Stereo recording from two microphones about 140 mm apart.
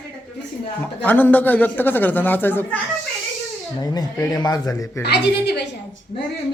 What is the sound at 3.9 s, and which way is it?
A man's voice, 30° left (ahead or behind).